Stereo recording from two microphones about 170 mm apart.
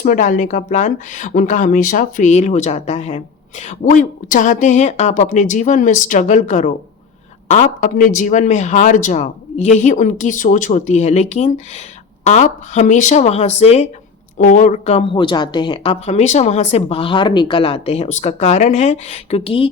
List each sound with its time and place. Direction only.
0.0 s a woman's voice: 50° left (ahead or behind); by 19.7 s 35° left (ahead or behind)